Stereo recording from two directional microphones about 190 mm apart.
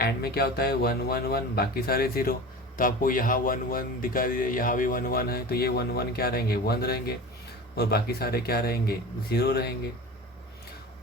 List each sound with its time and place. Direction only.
0.0 s speech: 55° left (ahead or behind)